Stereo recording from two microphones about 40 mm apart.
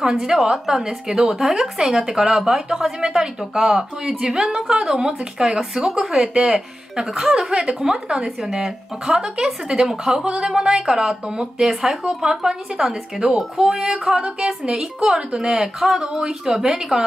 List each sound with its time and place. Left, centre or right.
0.0 s a woman's voice: centre
1.0 s a woman's voice: centre
8.5 s speech: centre
9.0 s a woman's voice: centre